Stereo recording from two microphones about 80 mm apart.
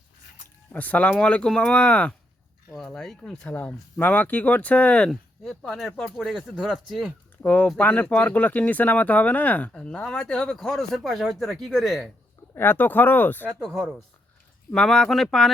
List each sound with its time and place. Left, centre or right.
0.7 s speech: centre
3.5 s speech: left
5.5 s speech: centre
7.4 s speech: centre
12.5 s speech: left
13.5 s speech: centre